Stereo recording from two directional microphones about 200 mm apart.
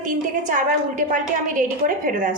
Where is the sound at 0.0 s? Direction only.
40° right (ahead or behind).